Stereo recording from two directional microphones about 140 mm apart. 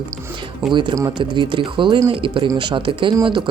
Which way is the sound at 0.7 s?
35° right (ahead or behind).